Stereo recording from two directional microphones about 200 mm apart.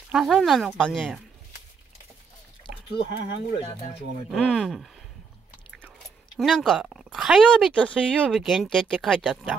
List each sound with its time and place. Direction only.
0.1 s speech: centre (ahead or behind)
2.9 s speech: 55° left (ahead or behind)
4.3 s speech: centre (ahead or behind)
6.3 s speech: centre (ahead or behind)